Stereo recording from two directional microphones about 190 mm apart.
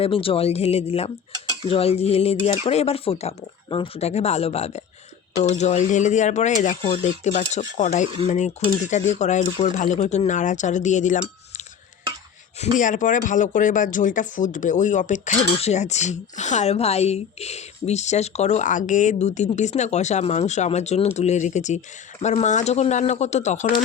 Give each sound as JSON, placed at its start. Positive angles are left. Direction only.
{"t": 0.0, "sound": "speech", "side_deg": 30}
{"t": 12.7, "sound": "speech", "side_deg": 40}